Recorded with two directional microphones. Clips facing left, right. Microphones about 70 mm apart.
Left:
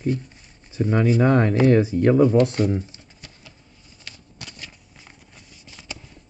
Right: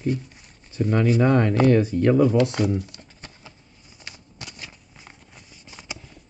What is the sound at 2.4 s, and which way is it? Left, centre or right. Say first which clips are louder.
Speech: left 2 dB; right.